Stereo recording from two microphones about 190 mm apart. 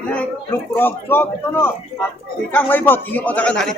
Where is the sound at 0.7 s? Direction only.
10° left (ahead or behind).